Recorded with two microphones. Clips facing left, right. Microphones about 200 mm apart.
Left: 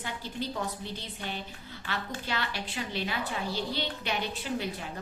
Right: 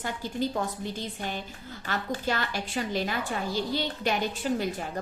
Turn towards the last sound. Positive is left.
turn(degrees=-45)  # may be behind; listen again after turning